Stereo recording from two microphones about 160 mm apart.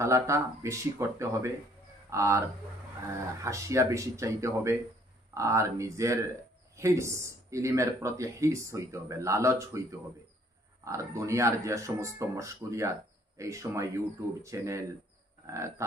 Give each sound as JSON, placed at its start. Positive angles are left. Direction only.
{"t": 0.0, "sound": "speech", "side_deg": -20}
{"t": 3.4, "sound": "speech", "side_deg": -20}